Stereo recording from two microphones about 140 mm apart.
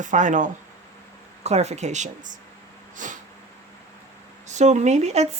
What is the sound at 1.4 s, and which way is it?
Speech, 50° right (ahead or behind).